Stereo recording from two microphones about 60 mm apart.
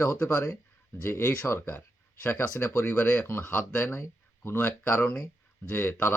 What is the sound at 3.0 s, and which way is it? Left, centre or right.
Speech, left.